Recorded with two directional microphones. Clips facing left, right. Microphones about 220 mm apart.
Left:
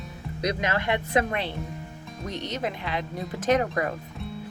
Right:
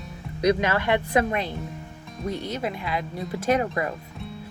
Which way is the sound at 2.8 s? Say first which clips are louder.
Right 1 dB; 40° left (ahead or behind).